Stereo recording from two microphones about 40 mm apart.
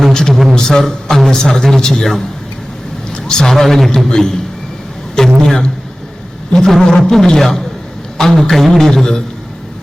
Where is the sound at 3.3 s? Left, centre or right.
Centre.